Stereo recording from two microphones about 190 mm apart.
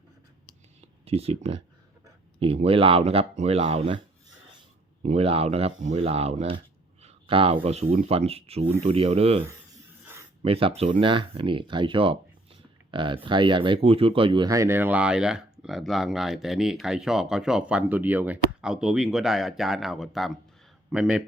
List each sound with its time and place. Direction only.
1.0 s speech: 35° right (ahead or behind)
5.0 s speech: 30° right (ahead or behind)
10.4 s speech: 30° right (ahead or behind); by 21.2 s 5° right (ahead or behind)